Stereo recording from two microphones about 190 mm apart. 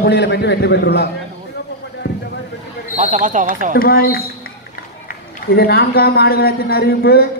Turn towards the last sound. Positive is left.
turn(degrees=55)  # may be behind; listen again after turning